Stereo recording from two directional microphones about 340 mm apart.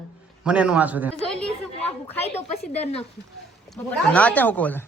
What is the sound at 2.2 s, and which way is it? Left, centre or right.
Speech, centre.